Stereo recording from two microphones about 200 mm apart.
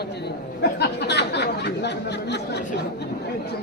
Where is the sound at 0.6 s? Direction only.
55° left (ahead or behind).